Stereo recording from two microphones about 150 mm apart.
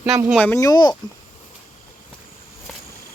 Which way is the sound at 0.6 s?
25° left (ahead or behind).